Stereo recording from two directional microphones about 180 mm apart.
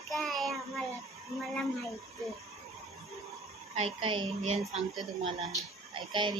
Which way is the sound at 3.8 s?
30° right (ahead or behind).